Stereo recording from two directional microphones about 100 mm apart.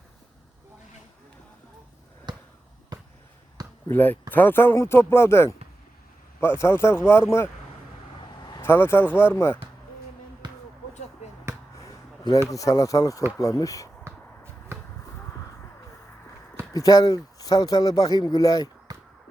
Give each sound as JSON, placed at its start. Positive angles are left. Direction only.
{"t": 3.8, "sound": "speech", "side_deg": 20}
{"t": 8.4, "sound": "vehicle", "side_deg": 45}
{"t": 8.6, "sound": "speech", "side_deg": 25}
{"t": 12.5, "sound": "speech", "side_deg": 35}
{"t": 14.0, "sound": "basketball bounce", "side_deg": -25}
{"t": 16.7, "sound": "speech", "side_deg": 35}
{"t": 18.9, "sound": "a sound", "side_deg": -40}